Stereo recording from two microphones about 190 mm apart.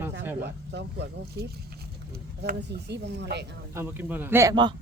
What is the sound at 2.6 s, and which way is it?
Speech, 60° right (ahead or behind).